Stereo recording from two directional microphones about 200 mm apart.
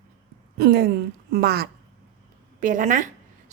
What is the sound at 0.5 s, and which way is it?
Speech, 50° right (ahead or behind).